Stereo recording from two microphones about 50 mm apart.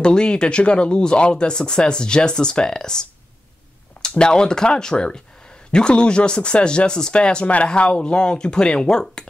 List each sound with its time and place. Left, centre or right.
0.0 s speech: centre
4.2 s speech: centre